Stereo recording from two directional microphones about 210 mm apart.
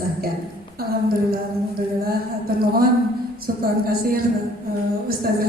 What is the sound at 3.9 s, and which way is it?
Speech, 45° right (ahead or behind).